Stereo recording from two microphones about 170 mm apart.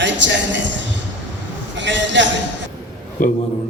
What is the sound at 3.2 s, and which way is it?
Speech, 50° left (ahead or behind).